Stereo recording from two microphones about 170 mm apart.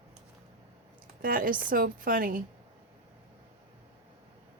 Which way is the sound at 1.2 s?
55° right (ahead or behind).